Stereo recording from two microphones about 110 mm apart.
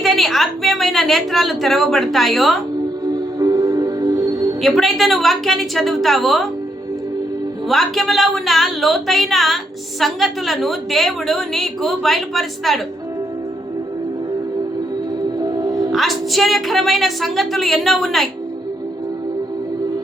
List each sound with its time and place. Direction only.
0.0 s a woman's voice: centre (ahead or behind)
3.1 s music: 35° right (ahead or behind)
4.6 s a woman's voice: centre (ahead or behind)
7.7 s a woman's voice: centre (ahead or behind)
15.4 s music: 35° right (ahead or behind)
15.9 s a woman's voice: centre (ahead or behind)